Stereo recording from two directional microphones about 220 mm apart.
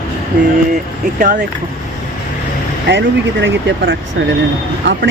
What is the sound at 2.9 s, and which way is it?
Speech, 55° right (ahead or behind).